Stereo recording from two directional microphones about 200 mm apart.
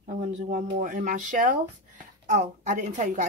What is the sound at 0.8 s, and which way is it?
A woman's voice, 40° right (ahead or behind).